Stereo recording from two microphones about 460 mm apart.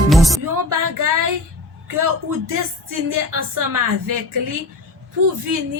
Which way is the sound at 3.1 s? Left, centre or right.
Right.